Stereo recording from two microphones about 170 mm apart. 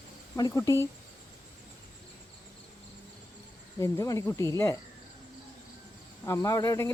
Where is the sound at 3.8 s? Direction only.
20° left (ahead or behind).